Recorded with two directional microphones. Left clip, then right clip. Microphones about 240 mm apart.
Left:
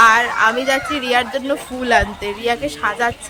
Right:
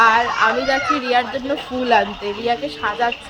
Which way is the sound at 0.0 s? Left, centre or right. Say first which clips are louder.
Left 2 dB; centre.